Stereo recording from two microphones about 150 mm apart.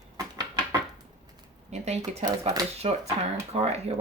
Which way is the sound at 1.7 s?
45° right (ahead or behind).